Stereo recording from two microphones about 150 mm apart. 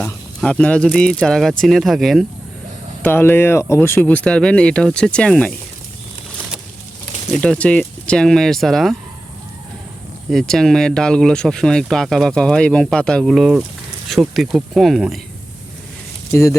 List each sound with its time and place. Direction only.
0.0 s speech: 10° left (ahead or behind)
3.0 s speech: 15° left (ahead or behind)
7.3 s speech: 5° left (ahead or behind)
10.3 s speech: 5° left (ahead or behind)
16.3 s speech: 20° left (ahead or behind)